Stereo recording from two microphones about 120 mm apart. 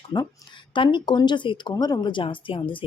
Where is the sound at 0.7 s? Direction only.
40° left (ahead or behind).